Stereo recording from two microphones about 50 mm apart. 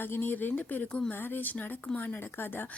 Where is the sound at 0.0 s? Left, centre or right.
Left.